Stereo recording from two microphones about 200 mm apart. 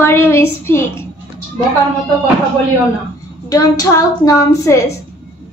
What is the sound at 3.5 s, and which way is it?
Child singing, 15° left (ahead or behind).